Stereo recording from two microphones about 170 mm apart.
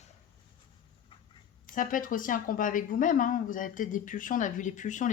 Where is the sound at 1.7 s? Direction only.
50° left (ahead or behind).